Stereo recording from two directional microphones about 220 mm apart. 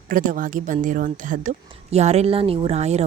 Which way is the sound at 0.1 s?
35° right (ahead or behind).